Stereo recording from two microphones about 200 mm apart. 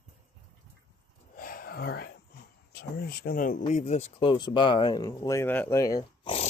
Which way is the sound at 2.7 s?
50° left (ahead or behind).